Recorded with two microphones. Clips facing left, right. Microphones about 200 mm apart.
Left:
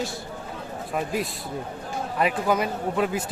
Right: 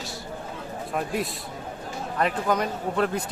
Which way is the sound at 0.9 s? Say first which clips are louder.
Left 1 dB; centre (ahead or behind).